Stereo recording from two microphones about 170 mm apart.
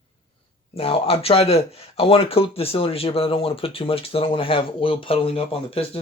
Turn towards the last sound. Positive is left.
turn(degrees=35)  # may be behind; listen again after turning